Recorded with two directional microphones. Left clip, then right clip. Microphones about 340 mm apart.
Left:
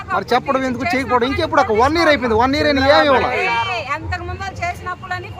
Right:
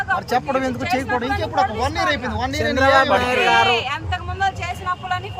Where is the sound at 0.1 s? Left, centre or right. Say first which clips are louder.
Left 5 dB; centre.